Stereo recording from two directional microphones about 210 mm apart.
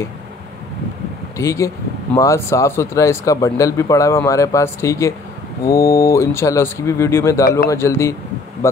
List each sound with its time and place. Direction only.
1.4 s speech: 15° left (ahead or behind)